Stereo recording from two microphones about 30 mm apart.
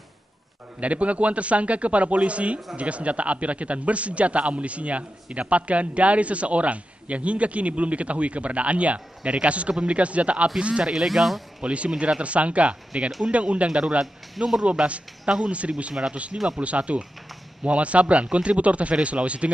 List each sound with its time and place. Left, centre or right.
0.7 s a man's voice: right
10.8 s speech: centre
11.1 s speech: centre
11.6 s a man's voice: right
13.7 s speech: right
15.2 s speech: right
16.1 s a man's voice: right